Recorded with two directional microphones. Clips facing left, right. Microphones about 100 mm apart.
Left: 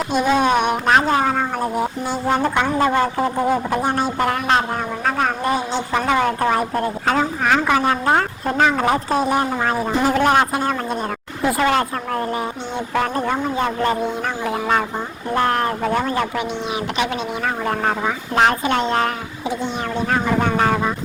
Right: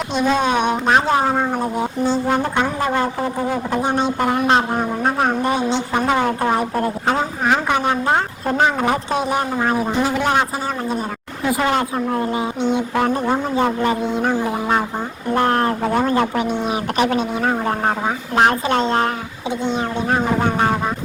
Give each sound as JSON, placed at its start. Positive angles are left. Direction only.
{"t": 0.1, "sound": "a sound", "side_deg": 10}
{"t": 1.2, "sound": "speech", "side_deg": -15}
{"t": 1.5, "sound": "a man's voice", "side_deg": 5}
{"t": 2.6, "sound": "a man's voice", "side_deg": -5}
{"t": 4.7, "sound": "speech", "side_deg": -25}
{"t": 5.5, "sound": "speech", "side_deg": 5}
{"t": 5.9, "sound": "speech", "side_deg": -20}
{"t": 8.0, "sound": "a man's voice", "side_deg": 0}
{"t": 9.6, "sound": "a man's voice", "side_deg": -5}
{"t": 15.4, "sound": "speech", "side_deg": -30}
{"t": 17.3, "sound": "speech", "side_deg": -30}